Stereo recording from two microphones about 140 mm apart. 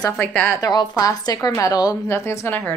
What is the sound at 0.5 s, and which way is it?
A woman's voice, 25° left (ahead or behind).